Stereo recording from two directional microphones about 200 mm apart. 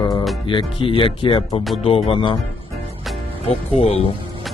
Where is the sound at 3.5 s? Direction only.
30° left (ahead or behind).